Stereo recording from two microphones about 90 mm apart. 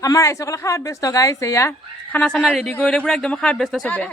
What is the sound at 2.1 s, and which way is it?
Speech, 10° left (ahead or behind).